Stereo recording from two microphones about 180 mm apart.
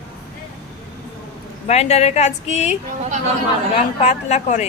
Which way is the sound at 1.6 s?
35° left (ahead or behind).